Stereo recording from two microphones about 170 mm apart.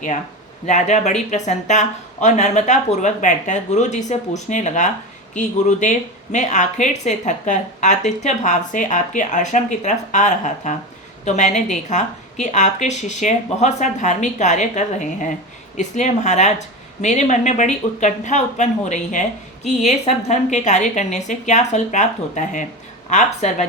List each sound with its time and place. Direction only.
0.6 s speech: 45° left (ahead or behind)